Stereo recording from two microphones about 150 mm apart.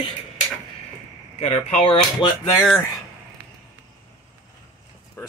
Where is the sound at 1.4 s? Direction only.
40° left (ahead or behind).